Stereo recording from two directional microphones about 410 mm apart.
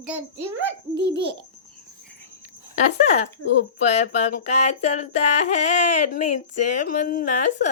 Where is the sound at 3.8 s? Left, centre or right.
Centre.